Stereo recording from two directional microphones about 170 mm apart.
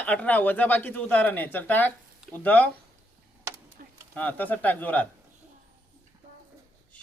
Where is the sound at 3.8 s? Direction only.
55° right (ahead or behind).